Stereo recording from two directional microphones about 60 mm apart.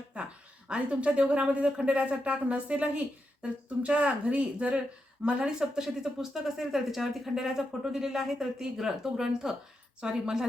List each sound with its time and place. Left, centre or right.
0.7 s speech: centre